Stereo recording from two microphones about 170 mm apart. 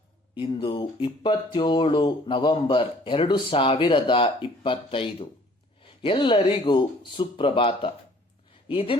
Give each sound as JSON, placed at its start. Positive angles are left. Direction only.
{"t": 0.3, "sound": "speech", "side_deg": 30}